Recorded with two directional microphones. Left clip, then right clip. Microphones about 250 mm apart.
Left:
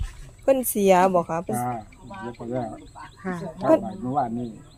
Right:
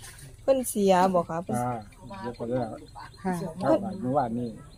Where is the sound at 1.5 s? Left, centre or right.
Centre.